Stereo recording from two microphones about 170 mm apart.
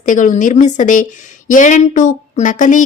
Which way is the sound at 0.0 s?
50° left (ahead or behind).